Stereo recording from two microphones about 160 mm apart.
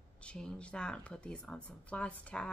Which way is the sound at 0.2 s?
5° left (ahead or behind).